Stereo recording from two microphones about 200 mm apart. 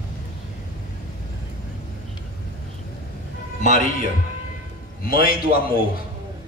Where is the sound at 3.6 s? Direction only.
40° left (ahead or behind).